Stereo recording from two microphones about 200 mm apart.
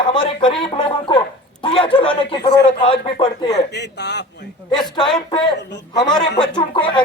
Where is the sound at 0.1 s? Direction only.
25° left (ahead or behind).